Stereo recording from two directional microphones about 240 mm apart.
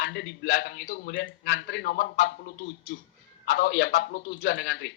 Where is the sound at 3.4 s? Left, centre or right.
Left.